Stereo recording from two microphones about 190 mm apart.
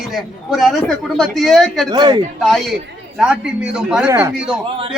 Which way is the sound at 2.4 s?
Centre (ahead or behind).